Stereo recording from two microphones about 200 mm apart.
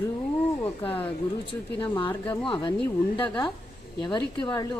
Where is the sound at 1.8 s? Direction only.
25° left (ahead or behind).